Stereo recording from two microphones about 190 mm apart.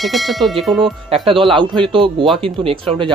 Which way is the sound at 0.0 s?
Centre (ahead or behind).